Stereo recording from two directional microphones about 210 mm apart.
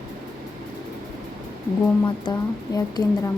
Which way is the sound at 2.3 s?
20° left (ahead or behind).